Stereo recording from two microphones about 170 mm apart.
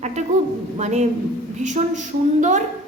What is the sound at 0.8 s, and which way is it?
A woman's voice, 40° right (ahead or behind).